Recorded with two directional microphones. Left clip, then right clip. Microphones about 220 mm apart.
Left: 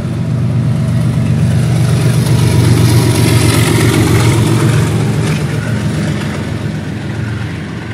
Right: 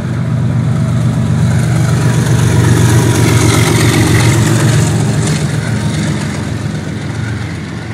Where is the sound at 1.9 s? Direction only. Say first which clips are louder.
Right 1 dB; 20° left (ahead or behind); by 4.3 s 15° right (ahead or behind).